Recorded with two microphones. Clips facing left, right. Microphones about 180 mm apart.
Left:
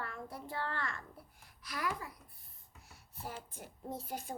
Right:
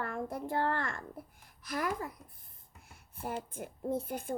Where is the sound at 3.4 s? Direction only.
55° right (ahead or behind).